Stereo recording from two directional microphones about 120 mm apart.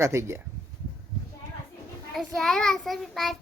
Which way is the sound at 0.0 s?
25° right (ahead or behind).